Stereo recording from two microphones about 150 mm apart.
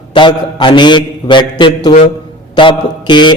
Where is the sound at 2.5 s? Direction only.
30° left (ahead or behind).